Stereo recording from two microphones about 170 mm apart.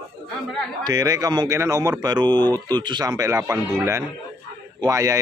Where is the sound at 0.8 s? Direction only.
20° right (ahead or behind).